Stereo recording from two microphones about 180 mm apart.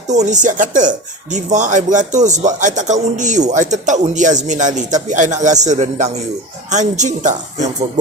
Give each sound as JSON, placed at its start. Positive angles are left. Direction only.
{"t": 0.1, "sound": "a woman's voice", "side_deg": -40}